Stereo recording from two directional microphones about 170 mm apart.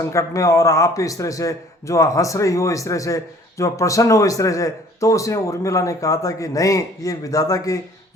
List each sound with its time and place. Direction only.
0.0 s speech: 20° left (ahead or behind)